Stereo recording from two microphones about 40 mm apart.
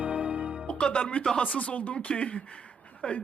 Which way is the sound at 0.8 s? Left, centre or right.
Left.